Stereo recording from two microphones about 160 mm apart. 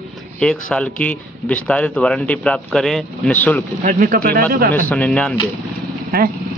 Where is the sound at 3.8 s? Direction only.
55° right (ahead or behind).